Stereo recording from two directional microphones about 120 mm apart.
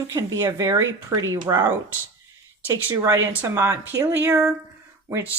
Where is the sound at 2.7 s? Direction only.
25° right (ahead or behind).